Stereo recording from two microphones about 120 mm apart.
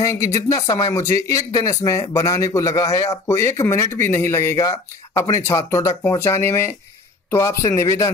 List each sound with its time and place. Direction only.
0.0 s speech: 25° left (ahead or behind)